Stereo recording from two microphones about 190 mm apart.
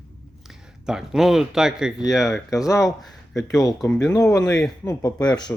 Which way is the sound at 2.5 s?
15° left (ahead or behind).